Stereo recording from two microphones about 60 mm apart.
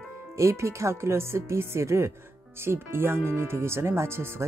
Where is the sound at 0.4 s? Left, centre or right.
Right.